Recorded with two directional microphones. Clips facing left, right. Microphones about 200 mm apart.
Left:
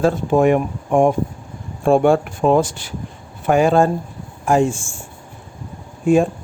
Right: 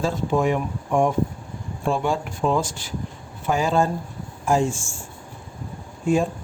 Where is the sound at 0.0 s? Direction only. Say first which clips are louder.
Left 7 dB; 55° left (ahead or behind).